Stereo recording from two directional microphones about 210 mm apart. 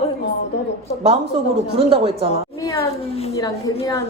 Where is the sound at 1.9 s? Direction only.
25° right (ahead or behind).